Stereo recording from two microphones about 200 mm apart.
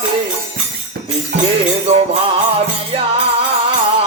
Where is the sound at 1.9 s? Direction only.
30° right (ahead or behind).